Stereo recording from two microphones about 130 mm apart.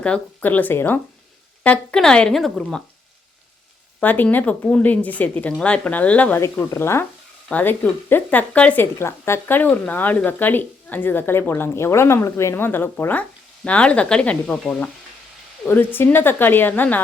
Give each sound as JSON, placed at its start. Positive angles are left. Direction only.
{"t": 0.0, "sound": "speech", "side_deg": 10}
{"t": 4.0, "sound": "speech", "side_deg": 15}